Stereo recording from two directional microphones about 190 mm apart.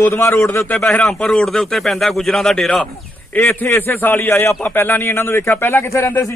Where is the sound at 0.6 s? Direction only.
5° left (ahead or behind).